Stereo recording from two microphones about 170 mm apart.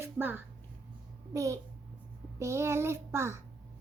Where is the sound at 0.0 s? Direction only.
10° right (ahead or behind).